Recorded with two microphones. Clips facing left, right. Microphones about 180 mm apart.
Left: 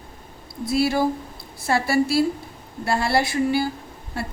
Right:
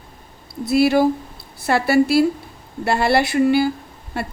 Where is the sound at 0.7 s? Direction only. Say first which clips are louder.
Right 5 dB; 65° right (ahead or behind).